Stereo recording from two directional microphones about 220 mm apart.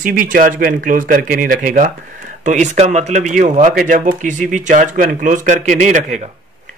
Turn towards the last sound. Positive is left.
turn(degrees=-35)  # may be behind; listen again after turning